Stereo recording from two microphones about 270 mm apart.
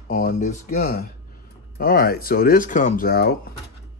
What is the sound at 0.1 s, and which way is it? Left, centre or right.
Speech, left.